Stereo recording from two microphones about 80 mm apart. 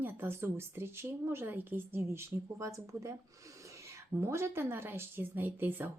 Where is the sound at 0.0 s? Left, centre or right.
Right.